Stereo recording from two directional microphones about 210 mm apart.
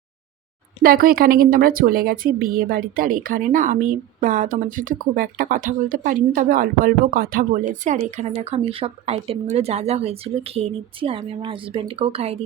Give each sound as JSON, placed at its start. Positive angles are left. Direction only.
{"t": 0.8, "sound": "a woman's voice", "side_deg": -45}